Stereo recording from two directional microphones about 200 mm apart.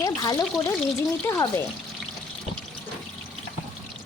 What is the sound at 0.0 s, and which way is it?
Speech, 20° left (ahead or behind).